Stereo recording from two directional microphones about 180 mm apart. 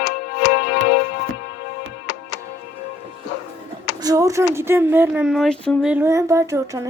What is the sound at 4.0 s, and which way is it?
Speech, 20° right (ahead or behind).